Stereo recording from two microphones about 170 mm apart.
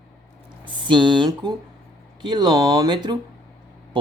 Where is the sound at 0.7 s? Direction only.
30° right (ahead or behind).